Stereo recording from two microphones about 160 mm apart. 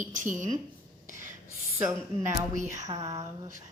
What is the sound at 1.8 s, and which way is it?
Speech, 15° right (ahead or behind).